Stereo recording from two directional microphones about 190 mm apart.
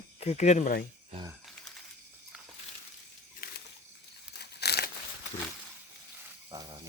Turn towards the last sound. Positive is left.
turn(degrees=-20)  # may be behind; listen again after turning